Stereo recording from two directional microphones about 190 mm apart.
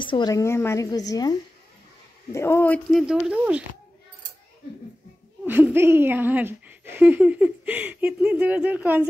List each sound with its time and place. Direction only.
0.0 s a woman's voice: 25° left (ahead or behind)
2.3 s speech: 15° left (ahead or behind); by 3.6 s 5° right (ahead or behind)
5.4 s speech: 10° right (ahead or behind)